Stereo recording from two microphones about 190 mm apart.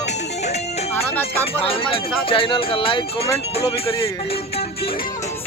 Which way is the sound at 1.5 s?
30° left (ahead or behind).